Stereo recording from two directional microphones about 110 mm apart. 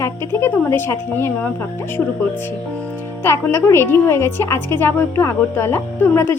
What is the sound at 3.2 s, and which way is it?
A woman's voice, 25° left (ahead or behind).